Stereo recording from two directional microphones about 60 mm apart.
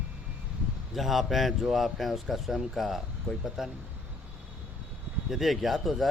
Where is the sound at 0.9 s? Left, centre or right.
Centre.